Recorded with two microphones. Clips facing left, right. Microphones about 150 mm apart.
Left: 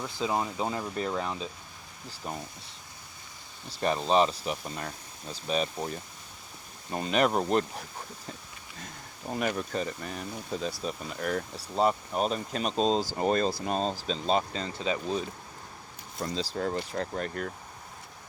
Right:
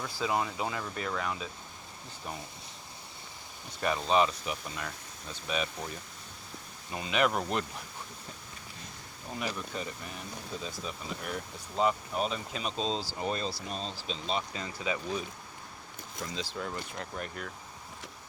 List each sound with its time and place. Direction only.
0.0 s speech: 20° left (ahead or behind)
3.7 s speech: 35° left (ahead or behind)
6.9 s speech: 40° left (ahead or behind)
9.3 s speech: 55° left (ahead or behind)
9.7 s speech: 40° left (ahead or behind)
11.2 s speech: 50° left (ahead or behind)
11.5 s speech: 35° left (ahead or behind)
16.2 s speech: 35° left (ahead or behind)